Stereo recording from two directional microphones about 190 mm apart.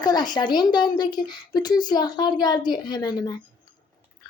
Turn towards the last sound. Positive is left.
turn(degrees=20)  # may be behind; listen again after turning